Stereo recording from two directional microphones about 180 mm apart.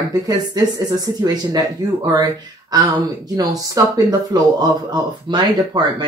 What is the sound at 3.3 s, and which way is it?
Speech, 20° right (ahead or behind).